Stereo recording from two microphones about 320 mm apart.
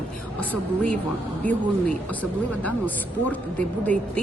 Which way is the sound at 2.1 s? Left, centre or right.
Centre.